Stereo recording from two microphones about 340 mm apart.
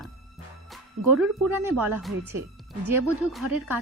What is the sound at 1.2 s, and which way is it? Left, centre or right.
Speech, centre.